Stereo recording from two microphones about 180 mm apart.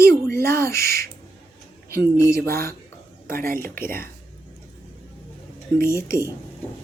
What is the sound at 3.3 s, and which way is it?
Speech, 55° right (ahead or behind).